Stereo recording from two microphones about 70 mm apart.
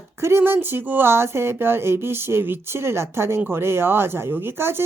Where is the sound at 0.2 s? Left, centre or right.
Right.